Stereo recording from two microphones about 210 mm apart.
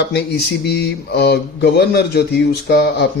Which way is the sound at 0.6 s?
50° left (ahead or behind).